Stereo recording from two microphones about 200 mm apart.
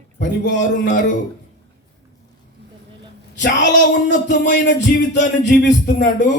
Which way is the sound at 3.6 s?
60° left (ahead or behind).